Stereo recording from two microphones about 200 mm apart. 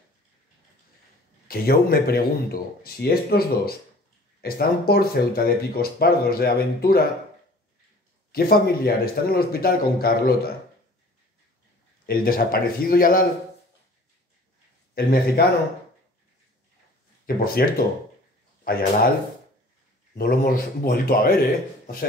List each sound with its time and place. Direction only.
1.5 s speech: 50° left (ahead or behind)
8.3 s speech: 50° left (ahead or behind)
12.1 s speech: 45° left (ahead or behind)
15.0 s speech: 50° left (ahead or behind)
17.4 s speech: 45° left (ahead or behind)
18.6 s a sound: 45° left (ahead or behind)
20.2 s speech: 45° left (ahead or behind)